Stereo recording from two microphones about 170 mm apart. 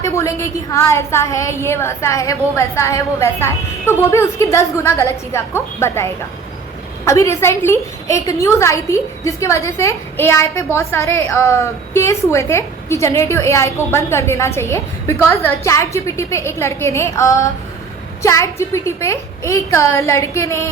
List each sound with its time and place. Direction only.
0.0 s a woman's voice: 15° left (ahead or behind)